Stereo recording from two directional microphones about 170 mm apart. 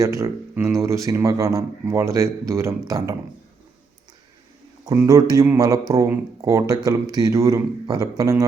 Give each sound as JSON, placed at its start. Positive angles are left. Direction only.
{"t": 0.0, "sound": "speech", "side_deg": -20}
{"t": 4.9, "sound": "speech", "side_deg": -20}